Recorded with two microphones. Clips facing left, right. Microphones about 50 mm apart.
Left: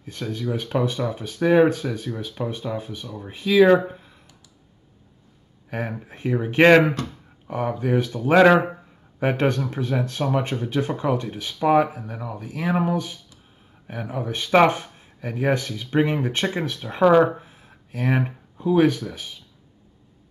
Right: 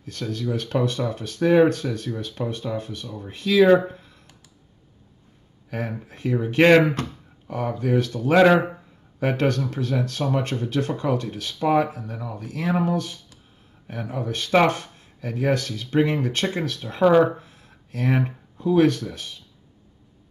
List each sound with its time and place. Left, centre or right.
0.0 s speech: centre
5.7 s speech: left